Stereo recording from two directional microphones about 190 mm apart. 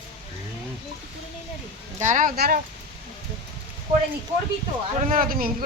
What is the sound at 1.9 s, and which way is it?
Speech, 40° right (ahead or behind).